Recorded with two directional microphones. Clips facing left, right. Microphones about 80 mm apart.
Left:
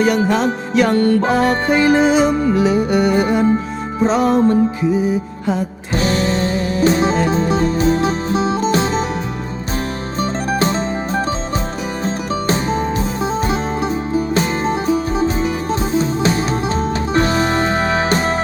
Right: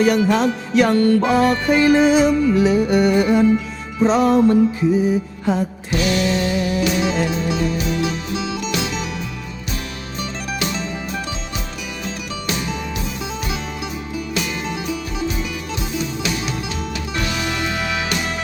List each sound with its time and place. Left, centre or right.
1.7 s music: left
6.0 s music: left
10.2 s music: left